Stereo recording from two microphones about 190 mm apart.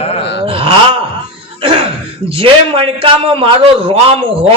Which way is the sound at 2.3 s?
30° right (ahead or behind).